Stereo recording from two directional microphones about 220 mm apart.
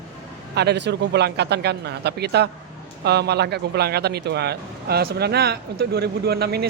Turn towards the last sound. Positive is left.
turn(degrees=-45)  # may be behind; listen again after turning